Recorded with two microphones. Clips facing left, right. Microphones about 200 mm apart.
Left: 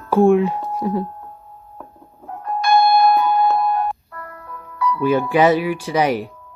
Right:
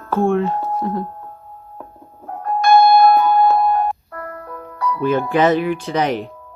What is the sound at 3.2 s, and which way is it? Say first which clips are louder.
Music: right 3 dB; 45° right (ahead or behind).